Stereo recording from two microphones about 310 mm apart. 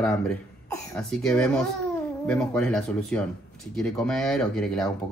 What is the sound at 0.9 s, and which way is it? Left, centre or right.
Speech, centre.